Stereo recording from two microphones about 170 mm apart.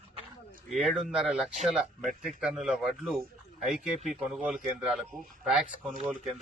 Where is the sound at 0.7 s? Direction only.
Centre (ahead or behind).